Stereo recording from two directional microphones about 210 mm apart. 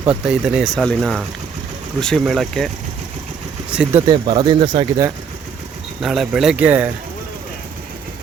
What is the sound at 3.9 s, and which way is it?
Speech, 25° right (ahead or behind).